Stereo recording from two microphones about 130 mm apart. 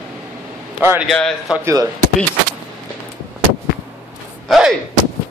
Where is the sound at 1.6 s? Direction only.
20° right (ahead or behind).